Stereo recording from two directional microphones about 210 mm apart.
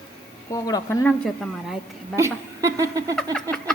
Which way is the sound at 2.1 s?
15° right (ahead or behind).